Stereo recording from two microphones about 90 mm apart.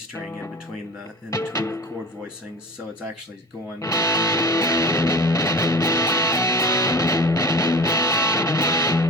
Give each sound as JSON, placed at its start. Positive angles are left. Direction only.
{"t": 1.3, "sound": "music", "side_deg": 35}
{"t": 3.8, "sound": "music", "side_deg": 35}